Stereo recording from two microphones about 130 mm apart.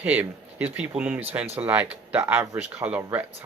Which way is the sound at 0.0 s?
10° right (ahead or behind).